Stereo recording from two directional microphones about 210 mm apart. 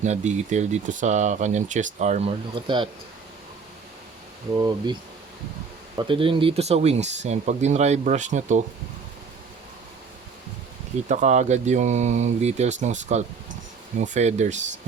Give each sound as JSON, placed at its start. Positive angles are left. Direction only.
{"t": 0.0, "sound": "speech", "side_deg": -35}
{"t": 4.5, "sound": "speech", "side_deg": -20}
{"t": 6.0, "sound": "speech", "side_deg": -25}
{"t": 11.1, "sound": "speech", "side_deg": -35}